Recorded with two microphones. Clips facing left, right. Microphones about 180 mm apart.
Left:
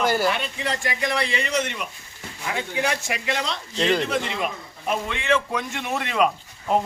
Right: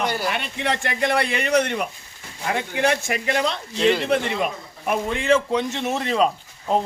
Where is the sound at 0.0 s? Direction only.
Centre (ahead or behind).